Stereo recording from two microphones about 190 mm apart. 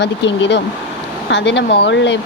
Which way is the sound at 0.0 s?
70° left (ahead or behind).